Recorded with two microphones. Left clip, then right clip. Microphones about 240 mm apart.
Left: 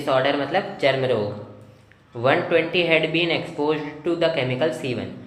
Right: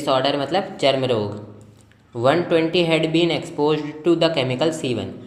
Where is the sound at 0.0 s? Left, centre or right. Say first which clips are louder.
Right 1 dB; right.